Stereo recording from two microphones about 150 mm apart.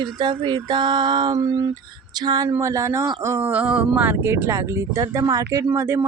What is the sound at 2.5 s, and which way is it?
Speech, 20° right (ahead or behind).